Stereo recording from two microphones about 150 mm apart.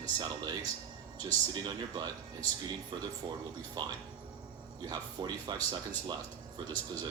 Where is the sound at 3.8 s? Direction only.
30° right (ahead or behind).